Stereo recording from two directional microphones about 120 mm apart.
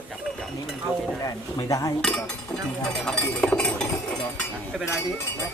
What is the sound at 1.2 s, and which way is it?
Speech, 30° left (ahead or behind).